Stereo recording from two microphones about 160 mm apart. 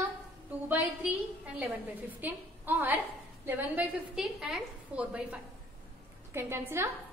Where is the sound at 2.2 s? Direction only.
10° right (ahead or behind).